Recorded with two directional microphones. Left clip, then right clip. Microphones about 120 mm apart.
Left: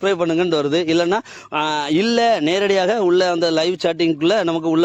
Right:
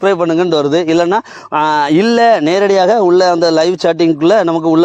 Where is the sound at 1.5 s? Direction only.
45° right (ahead or behind).